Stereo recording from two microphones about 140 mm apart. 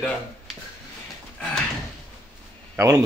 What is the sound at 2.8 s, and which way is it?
Speech, 20° right (ahead or behind).